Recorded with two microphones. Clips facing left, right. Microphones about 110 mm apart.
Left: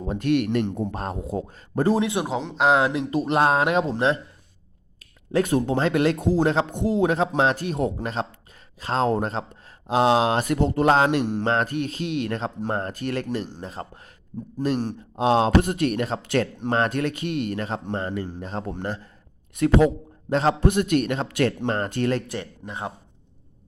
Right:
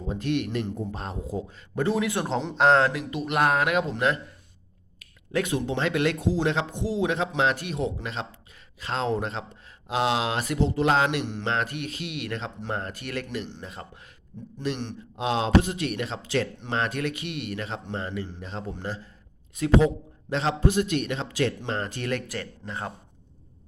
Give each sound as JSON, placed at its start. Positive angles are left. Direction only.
{"t": 0.0, "sound": "a man's voice", "side_deg": 55}
{"t": 0.9, "sound": "a man's voice", "side_deg": 55}
{"t": 1.5, "sound": "speech", "side_deg": 35}
{"t": 2.2, "sound": "speech", "side_deg": 5}
{"t": 2.9, "sound": "a man's voice", "side_deg": 25}
{"t": 6.1, "sound": "speech", "side_deg": 50}
{"t": 6.7, "sound": "a man's voice", "side_deg": 50}
{"t": 20.3, "sound": "speech", "side_deg": 45}
{"t": 20.6, "sound": "speech", "side_deg": 55}
{"t": 22.0, "sound": "speech", "side_deg": 30}
{"t": 22.4, "sound": "speech", "side_deg": 15}